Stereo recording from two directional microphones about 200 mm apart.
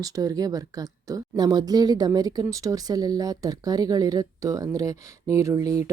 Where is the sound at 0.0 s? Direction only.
15° right (ahead or behind).